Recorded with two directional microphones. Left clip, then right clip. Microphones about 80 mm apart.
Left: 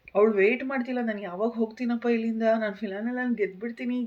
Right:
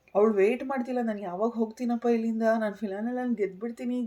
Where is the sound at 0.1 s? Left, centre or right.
Right.